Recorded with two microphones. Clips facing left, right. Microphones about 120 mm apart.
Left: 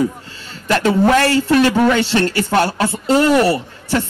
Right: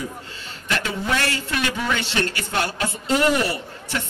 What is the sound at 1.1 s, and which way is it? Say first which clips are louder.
Speech: left 11 dB; 40° left (ahead or behind).